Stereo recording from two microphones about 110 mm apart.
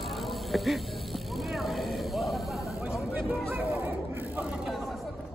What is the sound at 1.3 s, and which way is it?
Vehicle, centre (ahead or behind).